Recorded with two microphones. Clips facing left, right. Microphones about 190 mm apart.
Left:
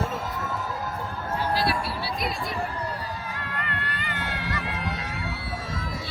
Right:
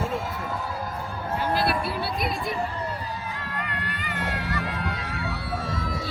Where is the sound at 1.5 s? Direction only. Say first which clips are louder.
Right 1 dB; 55° right (ahead or behind).